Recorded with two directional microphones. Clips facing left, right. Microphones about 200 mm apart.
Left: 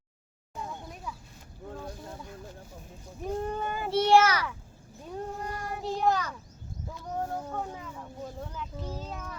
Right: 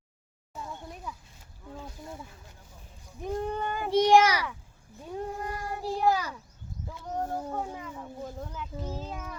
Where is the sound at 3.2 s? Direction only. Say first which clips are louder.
Right 1 dB; centre (ahead or behind).